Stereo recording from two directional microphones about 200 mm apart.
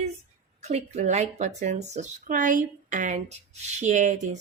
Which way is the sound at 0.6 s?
35° right (ahead or behind).